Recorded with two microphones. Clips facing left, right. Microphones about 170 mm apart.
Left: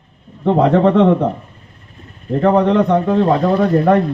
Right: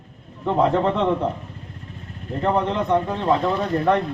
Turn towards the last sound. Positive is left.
turn(degrees=50)  # may be behind; listen again after turning